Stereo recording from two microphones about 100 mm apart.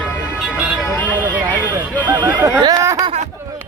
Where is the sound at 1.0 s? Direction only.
15° right (ahead or behind).